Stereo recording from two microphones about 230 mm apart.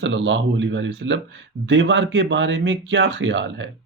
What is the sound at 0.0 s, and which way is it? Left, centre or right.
Speech, right.